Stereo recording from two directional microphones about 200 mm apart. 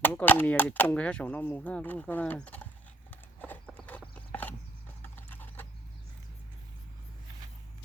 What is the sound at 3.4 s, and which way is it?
Clip-clop, 5° left (ahead or behind).